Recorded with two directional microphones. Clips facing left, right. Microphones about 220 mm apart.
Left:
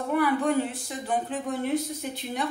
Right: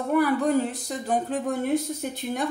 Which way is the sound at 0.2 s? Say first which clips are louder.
Right 1 dB; 40° right (ahead or behind).